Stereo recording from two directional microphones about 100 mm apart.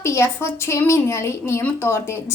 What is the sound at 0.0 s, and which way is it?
A woman's voice, 25° left (ahead or behind).